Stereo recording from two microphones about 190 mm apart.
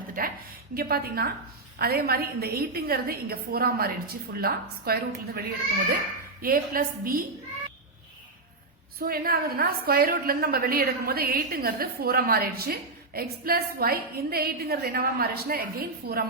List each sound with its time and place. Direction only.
0.2 s a woman's voice: 45° right (ahead or behind)
6.4 s a woman's voice: 50° right (ahead or behind)
9.0 s a woman's voice: 50° right (ahead or behind)